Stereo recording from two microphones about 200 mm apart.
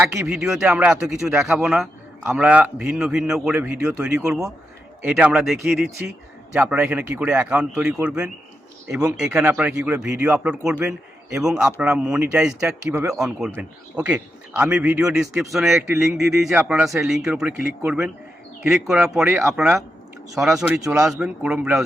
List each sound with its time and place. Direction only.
0.0 s a man's voice: 5° right (ahead or behind)